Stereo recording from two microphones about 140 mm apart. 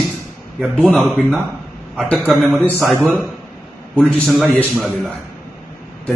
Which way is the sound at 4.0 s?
5° left (ahead or behind).